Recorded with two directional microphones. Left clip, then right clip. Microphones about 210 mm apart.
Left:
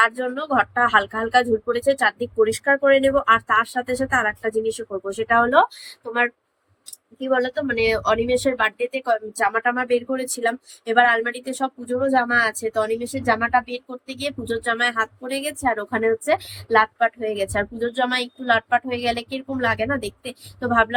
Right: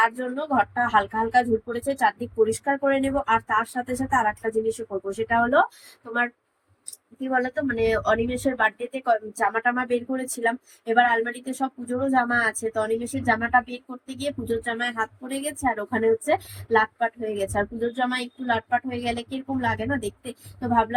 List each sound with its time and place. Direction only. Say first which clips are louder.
0.0 s speech: left 3 dB; 10° left (ahead or behind)
7.3 s speech: left 4 dB; 15° left (ahead or behind)
7.5 s speech: left 3 dB; centre (ahead or behind)
7.9 s speech: left 3 dB; 15° left (ahead or behind)
8.5 s speech: left 2 dB; centre (ahead or behind)
9.4 s speech: left 3 dB; 20° left (ahead or behind)
9.6 s speech: left 3 dB; 5° left (ahead or behind)
14.1 s speech: left 1 dB; 5° left (ahead or behind)